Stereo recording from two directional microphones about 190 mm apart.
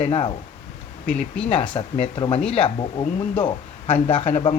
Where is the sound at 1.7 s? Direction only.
35° left (ahead or behind).